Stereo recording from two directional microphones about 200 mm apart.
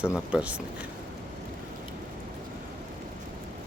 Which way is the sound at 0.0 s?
5° right (ahead or behind).